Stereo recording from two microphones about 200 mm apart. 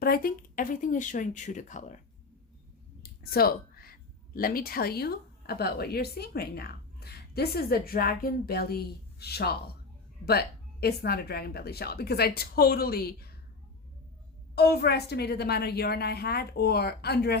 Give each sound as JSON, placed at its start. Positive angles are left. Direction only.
{"t": 0.0, "sound": "speech", "side_deg": 50}
{"t": 3.0, "sound": "a sound", "side_deg": 50}
{"t": 4.4, "sound": "a woman's voice", "side_deg": 45}
{"t": 14.5, "sound": "a woman's voice", "side_deg": 50}